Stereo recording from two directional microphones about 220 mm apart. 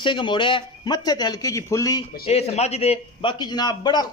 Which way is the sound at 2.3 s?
30° left (ahead or behind).